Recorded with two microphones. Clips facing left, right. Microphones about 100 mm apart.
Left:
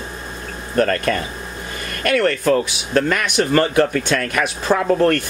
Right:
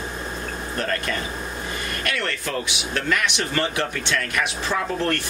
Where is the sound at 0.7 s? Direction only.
55° left (ahead or behind).